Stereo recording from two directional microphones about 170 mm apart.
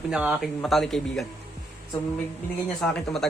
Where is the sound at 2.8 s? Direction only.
Centre (ahead or behind).